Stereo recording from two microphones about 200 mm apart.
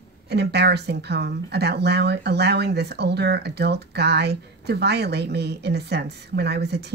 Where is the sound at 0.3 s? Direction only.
55° right (ahead or behind).